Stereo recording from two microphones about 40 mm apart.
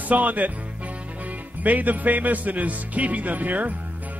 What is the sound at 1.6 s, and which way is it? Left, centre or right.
Speech, right.